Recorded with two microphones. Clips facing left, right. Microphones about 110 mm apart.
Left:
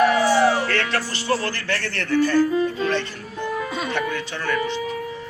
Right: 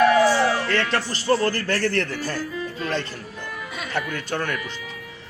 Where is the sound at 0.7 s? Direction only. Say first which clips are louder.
Right 1 dB; 30° right (ahead or behind).